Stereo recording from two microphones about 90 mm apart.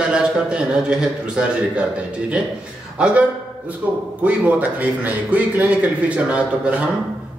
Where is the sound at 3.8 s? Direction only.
15° right (ahead or behind).